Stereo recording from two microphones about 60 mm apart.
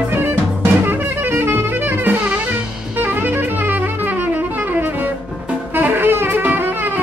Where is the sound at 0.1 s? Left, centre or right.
Right.